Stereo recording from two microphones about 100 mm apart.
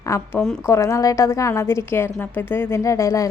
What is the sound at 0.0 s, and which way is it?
A woman's voice, 30° left (ahead or behind).